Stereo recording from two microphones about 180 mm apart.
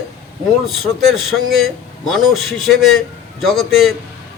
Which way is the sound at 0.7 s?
Centre (ahead or behind).